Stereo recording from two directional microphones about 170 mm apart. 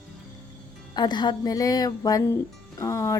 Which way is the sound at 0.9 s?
25° left (ahead or behind).